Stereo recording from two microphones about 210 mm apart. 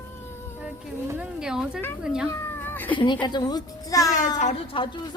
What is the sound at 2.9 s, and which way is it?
A woman's voice, 20° left (ahead or behind).